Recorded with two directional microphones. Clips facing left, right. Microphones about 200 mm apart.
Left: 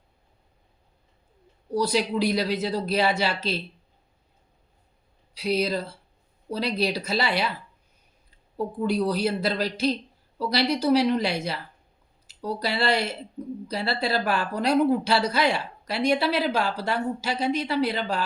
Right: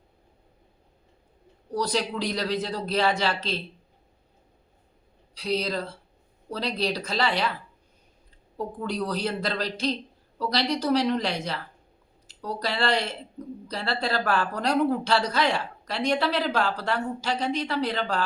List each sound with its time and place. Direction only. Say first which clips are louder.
1.7 s speech: left 3 dB; 10° left (ahead or behind)
5.3 s speech: left 3 dB; 10° left (ahead or behind)